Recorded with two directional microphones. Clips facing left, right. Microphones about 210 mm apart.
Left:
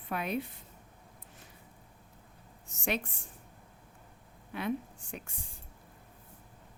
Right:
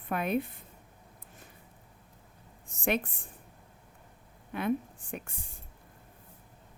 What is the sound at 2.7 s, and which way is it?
Speech, 55° right (ahead or behind).